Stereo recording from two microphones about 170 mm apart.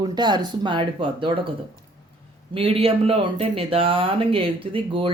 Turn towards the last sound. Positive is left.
turn(degrees=-30)  # may be behind; listen again after turning